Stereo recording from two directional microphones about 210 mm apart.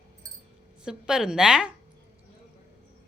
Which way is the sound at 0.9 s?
5° right (ahead or behind).